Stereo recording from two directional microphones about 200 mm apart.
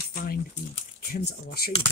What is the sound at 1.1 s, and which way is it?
Speech, 45° left (ahead or behind).